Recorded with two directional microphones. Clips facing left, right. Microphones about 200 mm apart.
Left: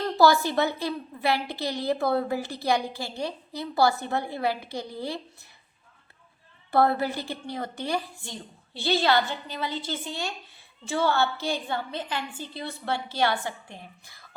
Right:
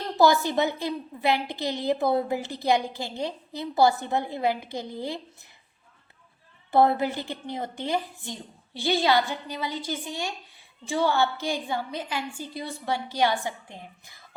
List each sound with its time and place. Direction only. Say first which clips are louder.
0.2 s a woman's voice: even; 20° right (ahead or behind)
6.7 s a woman's voice: right 2 dB; 20° right (ahead or behind)